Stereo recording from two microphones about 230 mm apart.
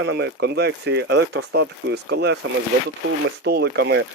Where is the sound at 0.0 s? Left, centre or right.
Right.